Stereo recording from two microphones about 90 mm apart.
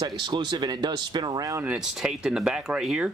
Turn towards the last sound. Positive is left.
turn(degrees=-10)  # may be behind; listen again after turning